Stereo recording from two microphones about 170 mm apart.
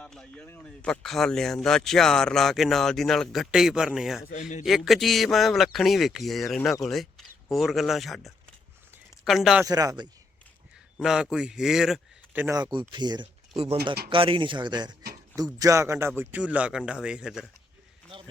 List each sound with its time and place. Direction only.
0.0 s speech: 5° left (ahead or behind)
4.3 s a man's voice: 50° left (ahead or behind)
4.6 s speech: centre (ahead or behind)
9.6 s speech: 20° right (ahead or behind)
10.9 s a man's voice: 5° right (ahead or behind)
12.5 s speech: 20° right (ahead or behind); by 17.4 s 5° right (ahead or behind)